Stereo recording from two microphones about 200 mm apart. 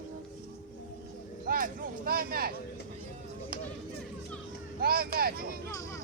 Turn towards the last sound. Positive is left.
turn(degrees=-50)  # may be behind; listen again after turning